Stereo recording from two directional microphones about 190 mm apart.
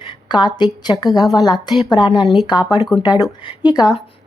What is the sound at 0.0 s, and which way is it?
A woman's voice, 25° left (ahead or behind).